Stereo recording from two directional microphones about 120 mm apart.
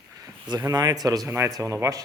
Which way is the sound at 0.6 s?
35° right (ahead or behind).